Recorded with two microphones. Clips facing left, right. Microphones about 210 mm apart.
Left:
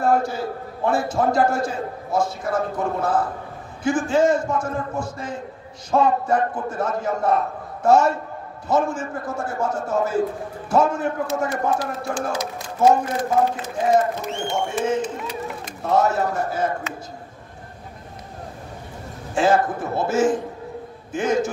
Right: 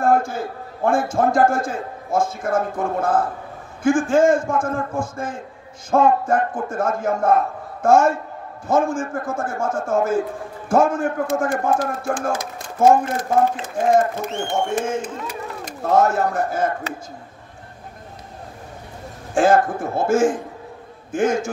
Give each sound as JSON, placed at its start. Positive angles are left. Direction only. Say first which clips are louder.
{"t": 0.0, "sound": "a man's voice", "louder": "right 1 dB", "side_deg": -50}
{"t": 19.3, "sound": "a man's voice", "louder": "right 3 dB", "side_deg": -50}